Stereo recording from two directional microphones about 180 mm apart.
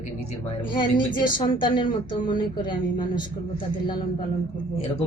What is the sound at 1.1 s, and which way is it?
Speech, 45° left (ahead or behind).